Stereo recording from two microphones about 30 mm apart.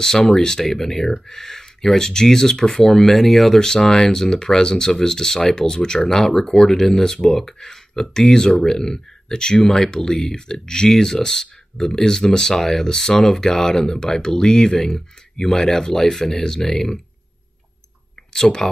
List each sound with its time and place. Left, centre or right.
0.2 s speech: left
18.6 s speech: centre